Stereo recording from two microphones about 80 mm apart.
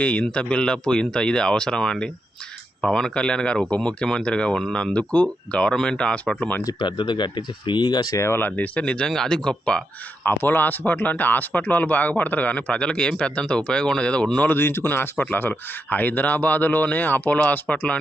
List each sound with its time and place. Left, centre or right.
0.0 s speech: centre
6.7 s speech: left
8.1 s speech: left; by 9.8 s centre
10.2 s speech: left
14.4 s speech: left